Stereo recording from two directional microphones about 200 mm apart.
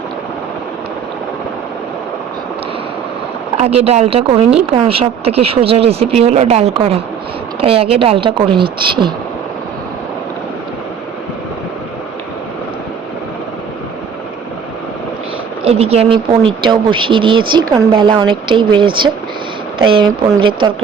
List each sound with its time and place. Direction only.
3.6 s speech: 30° right (ahead or behind)
15.6 s speech: 30° right (ahead or behind)